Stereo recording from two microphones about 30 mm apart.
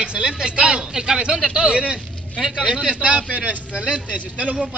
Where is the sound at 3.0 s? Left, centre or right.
Right.